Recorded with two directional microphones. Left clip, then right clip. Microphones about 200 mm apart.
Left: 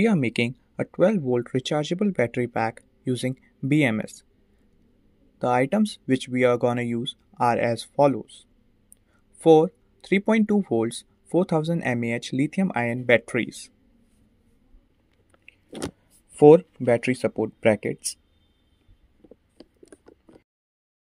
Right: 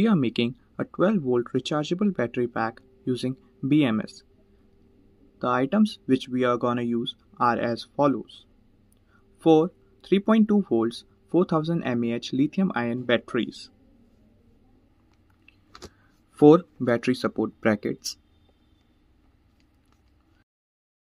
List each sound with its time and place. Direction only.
0.0 s speech: 25° left (ahead or behind)
5.4 s speech: 30° left (ahead or behind)
16.3 s speech: 20° left (ahead or behind)